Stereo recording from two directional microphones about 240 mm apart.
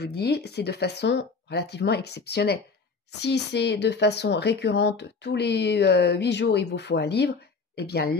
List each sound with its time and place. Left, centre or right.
0.0 s speech: left